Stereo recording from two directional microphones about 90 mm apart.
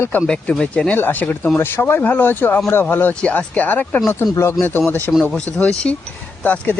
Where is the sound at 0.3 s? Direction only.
10° left (ahead or behind).